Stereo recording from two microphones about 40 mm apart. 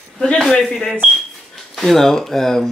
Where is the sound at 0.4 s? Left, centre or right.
Centre.